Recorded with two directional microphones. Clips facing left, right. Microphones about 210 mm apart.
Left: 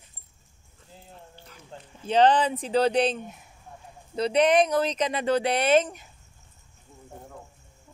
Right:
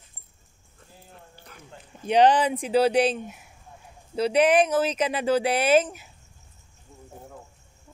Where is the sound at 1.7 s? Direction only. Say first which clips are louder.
Left 6 dB; 30° left (ahead or behind).